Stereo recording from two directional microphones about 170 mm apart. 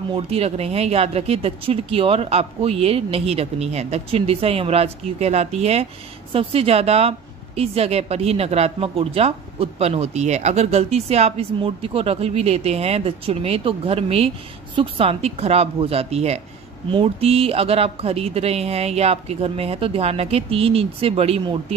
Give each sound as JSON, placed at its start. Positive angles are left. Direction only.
{"t": 0.1, "sound": "a woman's voice", "side_deg": -35}